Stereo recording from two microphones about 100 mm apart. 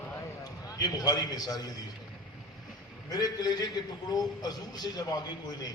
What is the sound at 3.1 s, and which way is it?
A man's voice, 40° left (ahead or behind).